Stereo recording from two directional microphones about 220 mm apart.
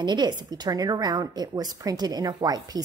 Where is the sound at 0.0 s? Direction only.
20° right (ahead or behind).